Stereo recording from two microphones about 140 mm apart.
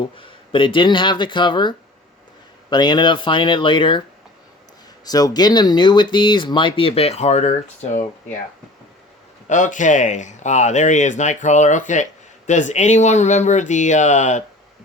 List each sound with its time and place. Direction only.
0.2 s speech: 35° left (ahead or behind)
5.0 s speech: 25° left (ahead or behind); by 8.0 s 55° left (ahead or behind)
9.5 s speech: 65° left (ahead or behind)